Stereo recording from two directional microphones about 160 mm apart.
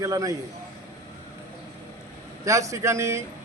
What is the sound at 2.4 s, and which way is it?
Speech, 20° right (ahead or behind).